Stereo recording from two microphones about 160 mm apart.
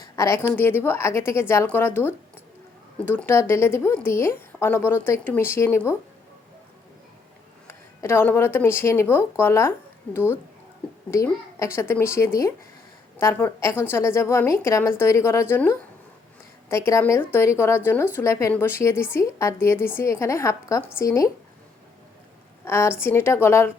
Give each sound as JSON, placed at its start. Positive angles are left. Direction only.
{"t": 0.0, "sound": "speech", "side_deg": 20}
{"t": 7.7, "sound": "speech", "side_deg": 15}
{"t": 22.6, "sound": "speech", "side_deg": 15}